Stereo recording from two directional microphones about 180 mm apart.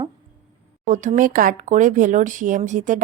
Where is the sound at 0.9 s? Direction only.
45° right (ahead or behind).